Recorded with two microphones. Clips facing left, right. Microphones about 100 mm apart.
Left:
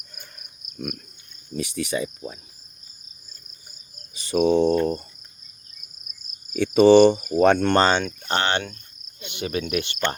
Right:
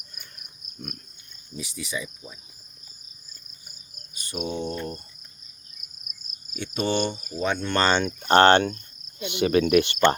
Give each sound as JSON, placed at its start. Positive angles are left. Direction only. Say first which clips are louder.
{"t": 1.5, "sound": "speech", "louder": "left 7 dB", "side_deg": 65}
{"t": 4.1, "sound": "cricket", "louder": "left 12 dB", "side_deg": 90}
{"t": 6.5, "sound": "speech", "louder": "left 13 dB", "side_deg": 90}
{"t": 8.3, "sound": "speech", "louder": "right 8 dB", "side_deg": -45}
{"t": 9.2, "sound": "speech", "louder": "right 7 dB", "side_deg": -75}